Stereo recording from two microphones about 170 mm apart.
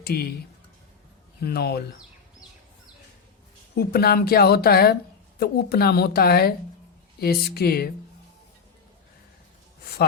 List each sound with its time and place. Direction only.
0.0 s speech: 65° left (ahead or behind)
1.4 s speech: 70° left (ahead or behind)
3.8 s a woman's voice: 65° left (ahead or behind)